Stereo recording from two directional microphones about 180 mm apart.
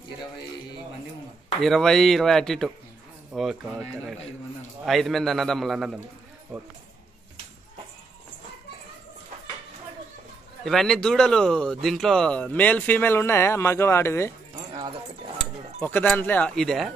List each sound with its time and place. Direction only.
1.6 s a man's voice: centre (ahead or behind)
10.6 s speech: centre (ahead or behind)
14.5 s a sound: 25° right (ahead or behind)
15.8 s speech: 10° left (ahead or behind)